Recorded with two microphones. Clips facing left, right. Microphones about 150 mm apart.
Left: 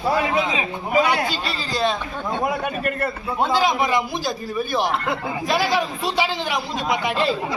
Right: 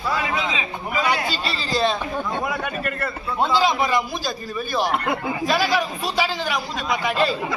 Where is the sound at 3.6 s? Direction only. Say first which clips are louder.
Even; 15° left (ahead or behind).